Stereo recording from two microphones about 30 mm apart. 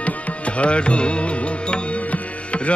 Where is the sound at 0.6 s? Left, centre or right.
Left.